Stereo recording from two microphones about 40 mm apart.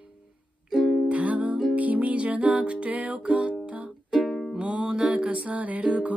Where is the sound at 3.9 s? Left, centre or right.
Centre.